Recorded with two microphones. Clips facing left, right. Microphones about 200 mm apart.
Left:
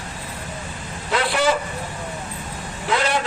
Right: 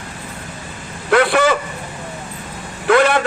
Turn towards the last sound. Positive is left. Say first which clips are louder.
# right 8 dB
turn(degrees=-60)  # may be behind; listen again after turning